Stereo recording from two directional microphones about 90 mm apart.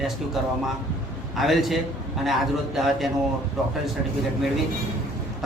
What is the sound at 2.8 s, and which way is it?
Speech, 5° right (ahead or behind).